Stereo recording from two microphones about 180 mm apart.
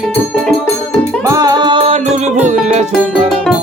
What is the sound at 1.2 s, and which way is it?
Music, 15° right (ahead or behind).